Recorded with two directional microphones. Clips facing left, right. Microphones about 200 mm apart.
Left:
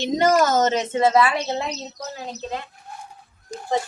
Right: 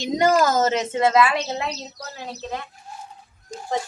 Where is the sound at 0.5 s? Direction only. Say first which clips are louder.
Left 1 dB; 10° right (ahead or behind).